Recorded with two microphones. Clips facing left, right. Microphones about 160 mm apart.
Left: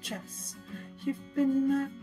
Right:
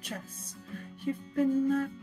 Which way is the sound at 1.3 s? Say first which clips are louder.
Left 1 dB; 30° left (ahead or behind).